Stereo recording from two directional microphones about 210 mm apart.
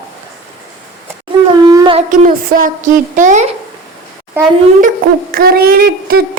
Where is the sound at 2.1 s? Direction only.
40° right (ahead or behind).